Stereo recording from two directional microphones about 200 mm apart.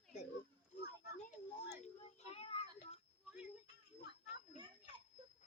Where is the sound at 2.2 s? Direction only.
30° left (ahead or behind).